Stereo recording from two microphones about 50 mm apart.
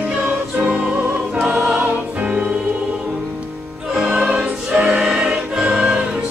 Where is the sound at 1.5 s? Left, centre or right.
Centre.